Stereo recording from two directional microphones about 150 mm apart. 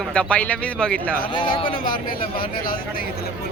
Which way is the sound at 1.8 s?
70° left (ahead or behind).